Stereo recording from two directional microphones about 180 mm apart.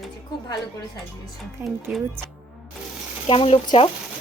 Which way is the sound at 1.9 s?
5° right (ahead or behind).